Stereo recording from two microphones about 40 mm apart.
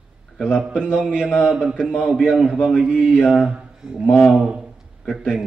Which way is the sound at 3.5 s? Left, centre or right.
Right.